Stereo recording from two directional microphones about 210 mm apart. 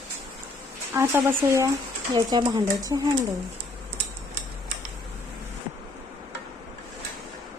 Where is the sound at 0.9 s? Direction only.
10° right (ahead or behind).